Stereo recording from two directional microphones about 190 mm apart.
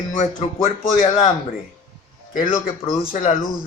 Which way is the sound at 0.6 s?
45° left (ahead or behind).